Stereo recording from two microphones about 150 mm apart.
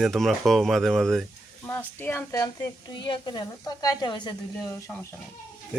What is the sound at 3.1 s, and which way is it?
Speech, 30° left (ahead or behind).